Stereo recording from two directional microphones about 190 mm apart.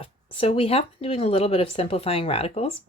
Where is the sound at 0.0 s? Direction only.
30° left (ahead or behind).